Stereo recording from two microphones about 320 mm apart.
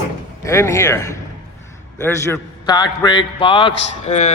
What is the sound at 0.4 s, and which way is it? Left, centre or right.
A man's voice, centre.